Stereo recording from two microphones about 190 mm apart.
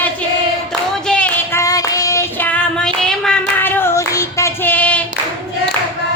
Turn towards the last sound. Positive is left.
turn(degrees=10)  # may be behind; listen again after turning